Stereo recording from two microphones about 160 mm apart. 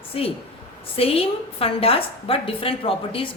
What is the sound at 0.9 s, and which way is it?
A woman's voice, 35° left (ahead or behind).